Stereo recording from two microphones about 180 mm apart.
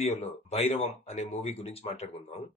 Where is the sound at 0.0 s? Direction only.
35° left (ahead or behind).